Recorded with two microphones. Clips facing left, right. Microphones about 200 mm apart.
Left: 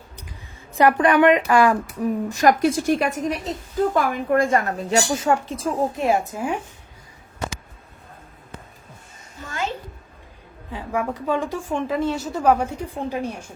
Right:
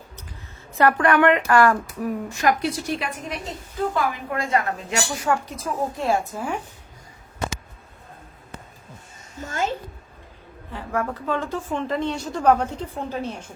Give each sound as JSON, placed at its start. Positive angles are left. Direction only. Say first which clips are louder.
{"t": 0.8, "sound": "a woman's voice", "louder": "left 2 dB", "side_deg": 15}
{"t": 2.4, "sound": "a woman's voice", "louder": "left 5 dB", "side_deg": 45}
{"t": 9.4, "sound": "a sound", "louder": "right 3 dB", "side_deg": -45}
{"t": 10.7, "sound": "a woman's voice", "louder": "left 1 dB", "side_deg": 15}